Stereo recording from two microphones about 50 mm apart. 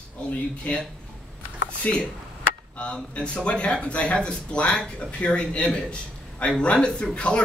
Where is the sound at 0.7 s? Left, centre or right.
Left.